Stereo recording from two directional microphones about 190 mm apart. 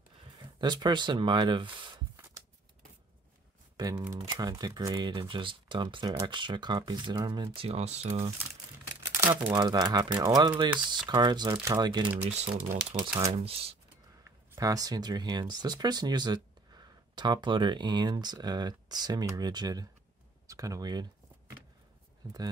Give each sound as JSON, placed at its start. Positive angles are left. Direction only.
{"t": 0.4, "sound": "speech", "side_deg": -25}
{"t": 2.1, "sound": "shuffling cards", "side_deg": -15}
{"t": 3.7, "sound": "speech", "side_deg": -20}
{"t": 9.3, "sound": "speech", "side_deg": -10}
{"t": 9.6, "sound": "speech", "side_deg": -20}
{"t": 12.2, "sound": "speech", "side_deg": -35}
{"t": 14.2, "sound": "speech", "side_deg": -15}
{"t": 22.2, "sound": "speech", "side_deg": -20}